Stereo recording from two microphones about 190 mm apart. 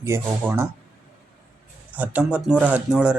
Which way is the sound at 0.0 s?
15° right (ahead or behind).